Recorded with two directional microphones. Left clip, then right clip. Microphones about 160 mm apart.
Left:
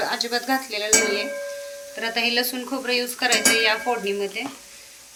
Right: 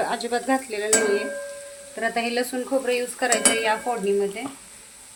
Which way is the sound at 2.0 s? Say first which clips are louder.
Left 2 dB; 65° right (ahead or behind).